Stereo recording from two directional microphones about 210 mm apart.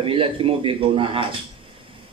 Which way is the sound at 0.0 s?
25° right (ahead or behind).